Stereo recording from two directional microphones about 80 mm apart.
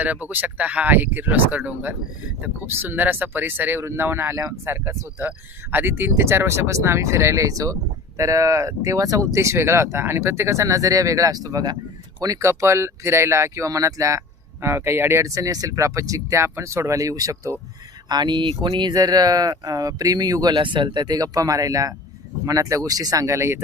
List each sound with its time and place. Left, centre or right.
0.0 s speech: centre; by 17.6 s right
18.1 s speech: right
20.6 s speech: right